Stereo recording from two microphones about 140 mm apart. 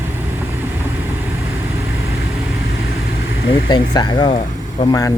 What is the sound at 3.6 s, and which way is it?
Speech, 30° left (ahead or behind).